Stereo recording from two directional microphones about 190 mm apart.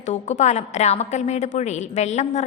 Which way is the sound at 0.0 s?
40° left (ahead or behind).